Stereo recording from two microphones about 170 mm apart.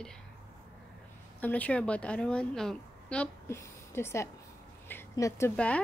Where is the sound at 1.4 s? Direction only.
10° left (ahead or behind).